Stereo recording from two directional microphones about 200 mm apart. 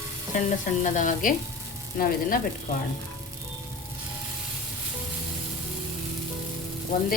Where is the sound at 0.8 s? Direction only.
40° left (ahead or behind).